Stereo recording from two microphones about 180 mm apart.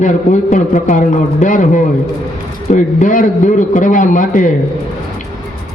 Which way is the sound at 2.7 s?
45° left (ahead or behind).